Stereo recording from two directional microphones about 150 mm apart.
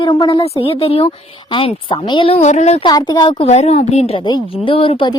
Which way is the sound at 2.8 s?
30° left (ahead or behind).